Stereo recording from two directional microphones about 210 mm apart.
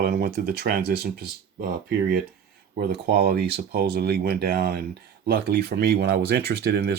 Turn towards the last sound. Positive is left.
turn(degrees=-50)  # may be behind; listen again after turning